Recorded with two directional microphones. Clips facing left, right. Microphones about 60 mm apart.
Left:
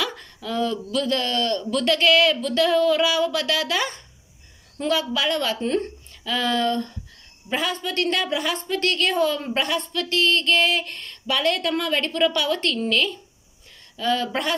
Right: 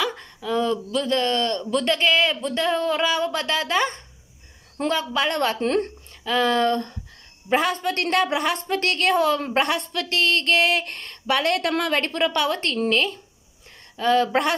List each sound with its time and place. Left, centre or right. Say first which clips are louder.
0.0 s a woman's voice: right 2 dB; centre; by 5.6 s right
5.6 s speech: right 2 dB; right
6.2 s a woman's voice: right 3 dB; right
7.5 s a woman's voice: right 3 dB; right